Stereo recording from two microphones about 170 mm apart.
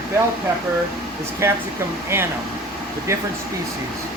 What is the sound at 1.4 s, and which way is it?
Speech, 15° right (ahead or behind).